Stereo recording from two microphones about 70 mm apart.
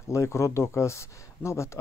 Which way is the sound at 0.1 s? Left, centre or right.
Left.